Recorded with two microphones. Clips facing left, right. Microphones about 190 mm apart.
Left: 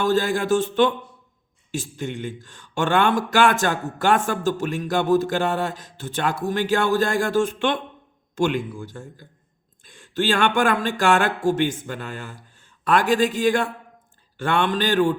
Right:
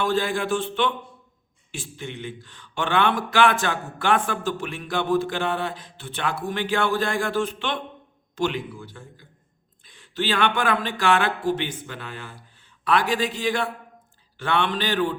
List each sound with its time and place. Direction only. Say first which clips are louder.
0.0 s speech: left 3 dB; 45° left (ahead or behind)